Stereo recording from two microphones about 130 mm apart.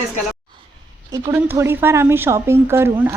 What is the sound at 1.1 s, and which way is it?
Speech, 20° right (ahead or behind).